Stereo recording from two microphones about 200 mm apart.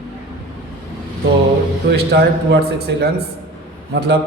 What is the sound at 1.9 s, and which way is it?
A man's voice, 55° right (ahead or behind).